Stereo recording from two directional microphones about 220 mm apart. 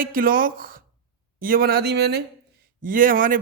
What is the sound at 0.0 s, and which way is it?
A man's voice, 40° right (ahead or behind).